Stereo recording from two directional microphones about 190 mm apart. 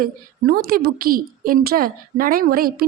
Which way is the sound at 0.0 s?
50° right (ahead or behind).